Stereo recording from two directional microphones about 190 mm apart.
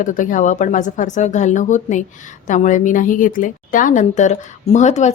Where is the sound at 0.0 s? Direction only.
45° left (ahead or behind).